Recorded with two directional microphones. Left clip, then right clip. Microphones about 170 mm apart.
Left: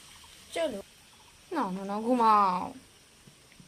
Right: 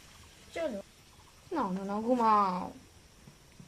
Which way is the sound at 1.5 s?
15° left (ahead or behind).